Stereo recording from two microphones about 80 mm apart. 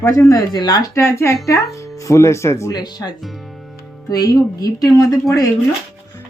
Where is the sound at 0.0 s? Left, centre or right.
Left.